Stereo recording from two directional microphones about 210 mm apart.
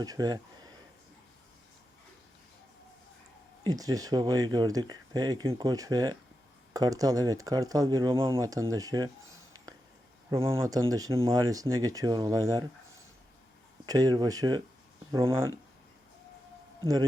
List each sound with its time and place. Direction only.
0.0 s speech: 20° right (ahead or behind)
3.6 s speech: 20° right (ahead or behind)
9.2 s a sound: 75° right (ahead or behind)
10.3 s speech: 15° right (ahead or behind)
13.8 s speech: 15° right (ahead or behind)